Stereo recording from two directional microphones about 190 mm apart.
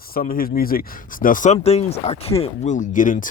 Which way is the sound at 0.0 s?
50° left (ahead or behind).